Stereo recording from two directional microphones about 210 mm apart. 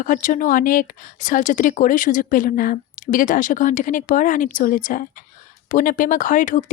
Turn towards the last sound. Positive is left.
turn(degrees=40)  # may be behind; listen again after turning